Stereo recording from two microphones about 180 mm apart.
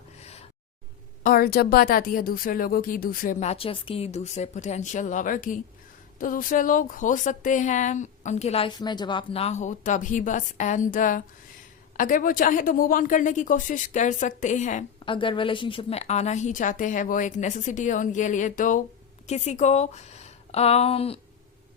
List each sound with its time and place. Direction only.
0.2 s gasp: 35° left (ahead or behind)
1.2 s a woman's voice: 55° left (ahead or behind)
15.0 s a woman's voice: 25° left (ahead or behind)